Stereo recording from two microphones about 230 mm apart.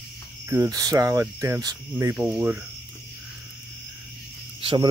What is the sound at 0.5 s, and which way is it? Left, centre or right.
Speech, centre.